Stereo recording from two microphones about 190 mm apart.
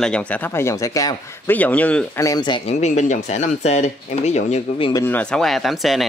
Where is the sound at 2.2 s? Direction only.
25° left (ahead or behind).